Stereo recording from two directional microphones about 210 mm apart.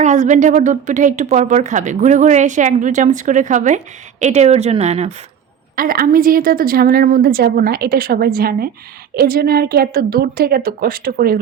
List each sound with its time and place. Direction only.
0.0 s speech: 35° right (ahead or behind)
5.7 s a woman's voice: 45° right (ahead or behind)